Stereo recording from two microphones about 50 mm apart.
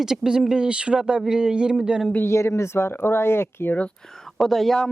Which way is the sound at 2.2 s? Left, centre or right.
Left.